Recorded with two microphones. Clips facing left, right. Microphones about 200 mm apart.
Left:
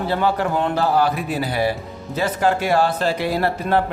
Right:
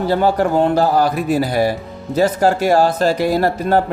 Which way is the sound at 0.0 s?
40° right (ahead or behind).